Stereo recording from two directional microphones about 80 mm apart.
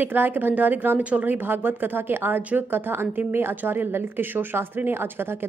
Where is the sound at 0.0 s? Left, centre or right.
Right.